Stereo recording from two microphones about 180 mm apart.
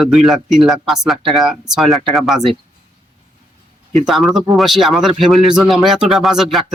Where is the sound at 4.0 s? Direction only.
Centre (ahead or behind).